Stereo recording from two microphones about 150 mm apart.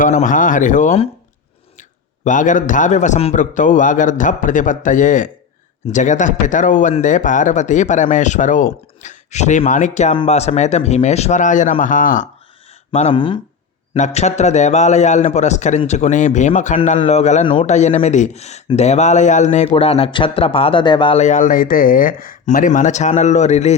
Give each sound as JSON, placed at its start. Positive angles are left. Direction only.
{"t": 0.0, "sound": "a man's voice", "side_deg": 60}
{"t": 2.2, "sound": "a man's voice", "side_deg": 60}
{"t": 12.9, "sound": "speech", "side_deg": 40}
{"t": 13.9, "sound": "speech", "side_deg": 50}
{"t": 17.4, "sound": "speech", "side_deg": 35}
{"t": 17.7, "sound": "speech", "side_deg": 50}
{"t": 19.7, "sound": "speech", "side_deg": 40}
{"t": 21.2, "sound": "a man's voice", "side_deg": 55}